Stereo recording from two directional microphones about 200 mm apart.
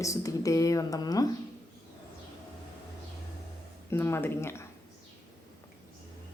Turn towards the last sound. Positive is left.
turn(degrees=10)  # may be behind; listen again after turning